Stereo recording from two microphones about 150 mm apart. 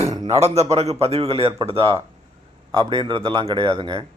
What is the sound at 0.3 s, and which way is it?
A man's voice, 45° right (ahead or behind).